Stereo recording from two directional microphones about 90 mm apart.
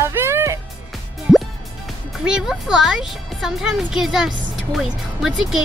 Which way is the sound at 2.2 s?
5° right (ahead or behind).